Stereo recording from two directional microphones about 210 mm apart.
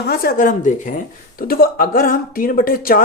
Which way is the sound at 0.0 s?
45° left (ahead or behind).